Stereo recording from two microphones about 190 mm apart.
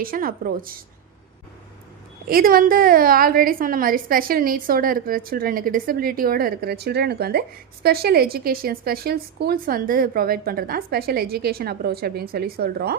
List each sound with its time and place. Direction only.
0.0 s a woman's voice: 50° right (ahead or behind)
2.2 s a woman's voice: 50° right (ahead or behind)